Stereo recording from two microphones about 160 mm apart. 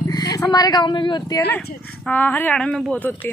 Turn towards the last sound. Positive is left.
turn(degrees=10)  # may be behind; listen again after turning